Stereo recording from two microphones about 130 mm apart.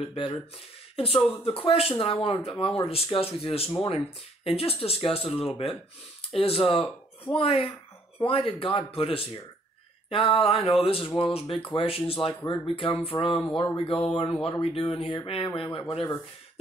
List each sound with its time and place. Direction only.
0.1 s speech: 45° left (ahead or behind)